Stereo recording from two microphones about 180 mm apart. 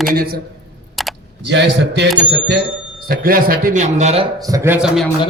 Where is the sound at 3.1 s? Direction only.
55° right (ahead or behind); by 4.3 s 35° right (ahead or behind).